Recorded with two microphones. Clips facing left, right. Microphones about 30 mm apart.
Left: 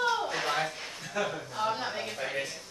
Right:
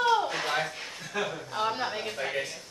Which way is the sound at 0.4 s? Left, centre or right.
Centre.